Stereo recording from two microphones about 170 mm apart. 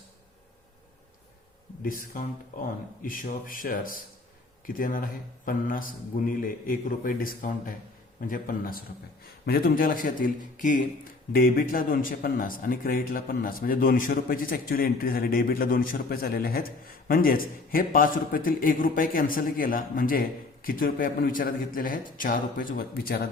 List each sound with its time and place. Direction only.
1.8 s a man's voice: 55° left (ahead or behind)